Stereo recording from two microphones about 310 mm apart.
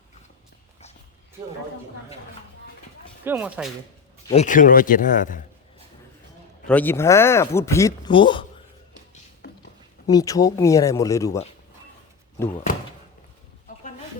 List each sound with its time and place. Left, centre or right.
3.2 s speech: centre
4.3 s speech: left
6.7 s speech: centre
10.1 s speech: centre